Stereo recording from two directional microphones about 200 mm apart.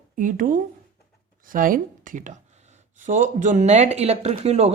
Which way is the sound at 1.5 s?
45° right (ahead or behind).